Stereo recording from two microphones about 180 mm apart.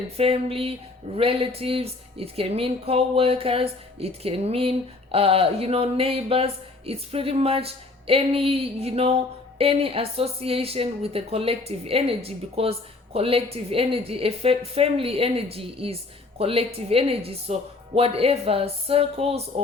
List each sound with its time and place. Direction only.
0.2 s speech: 30° right (ahead or behind)